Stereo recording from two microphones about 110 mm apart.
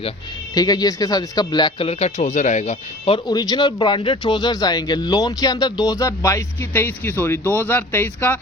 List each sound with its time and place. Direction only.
0.5 s speech: 35° left (ahead or behind)
1.8 s speech: 75° left (ahead or behind); by 3.2 s 90° left
3.2 s speech: 40° left (ahead or behind); by 8.4 s 20° left (ahead or behind)